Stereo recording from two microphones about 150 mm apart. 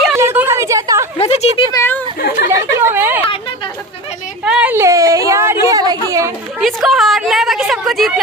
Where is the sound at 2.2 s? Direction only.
80° left.